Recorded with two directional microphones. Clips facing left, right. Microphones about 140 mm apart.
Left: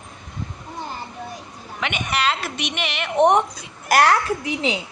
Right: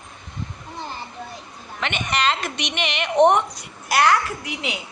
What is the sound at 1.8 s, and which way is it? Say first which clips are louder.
A woman's voice: even; 5° left (ahead or behind).